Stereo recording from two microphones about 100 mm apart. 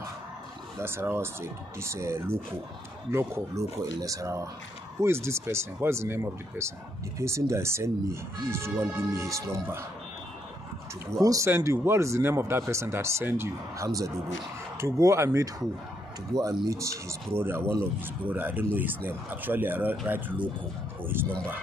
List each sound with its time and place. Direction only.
0.7 s speech: 25° right (ahead or behind)
11.1 s speech: 35° right (ahead or behind)
16.6 s speech: 30° right (ahead or behind)
21.0 s speech: 20° right (ahead or behind)